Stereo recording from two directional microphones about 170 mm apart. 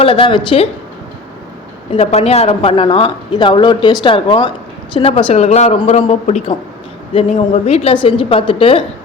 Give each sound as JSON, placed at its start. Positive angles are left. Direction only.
{"t": 0.0, "sound": "a woman's voice", "side_deg": 30}
{"t": 1.9, "sound": "a woman's voice", "side_deg": 35}